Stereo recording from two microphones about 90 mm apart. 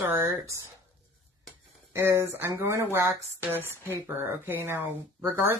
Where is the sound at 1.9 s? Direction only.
30° right (ahead or behind).